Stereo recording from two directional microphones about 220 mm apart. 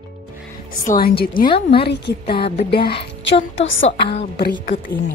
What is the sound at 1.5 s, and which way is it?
Speech, 25° left (ahead or behind).